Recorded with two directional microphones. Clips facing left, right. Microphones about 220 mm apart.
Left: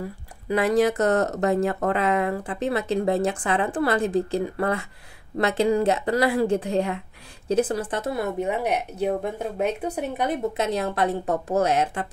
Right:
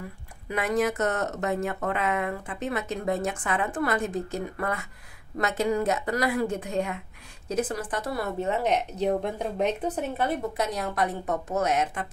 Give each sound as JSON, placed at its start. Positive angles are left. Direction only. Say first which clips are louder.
{"t": 0.5, "sound": "speech", "louder": "left 6 dB", "side_deg": 30}